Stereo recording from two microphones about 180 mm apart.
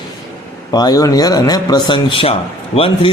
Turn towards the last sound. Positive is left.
turn(degrees=30)  # may be behind; listen again after turning